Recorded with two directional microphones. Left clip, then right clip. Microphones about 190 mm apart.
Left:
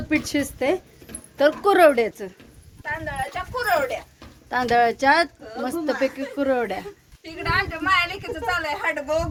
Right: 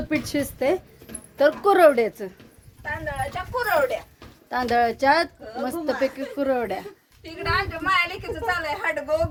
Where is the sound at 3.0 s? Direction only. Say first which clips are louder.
Right 1 dB; 45° right (ahead or behind).